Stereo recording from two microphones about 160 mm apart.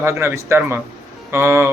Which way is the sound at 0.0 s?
15° right (ahead or behind).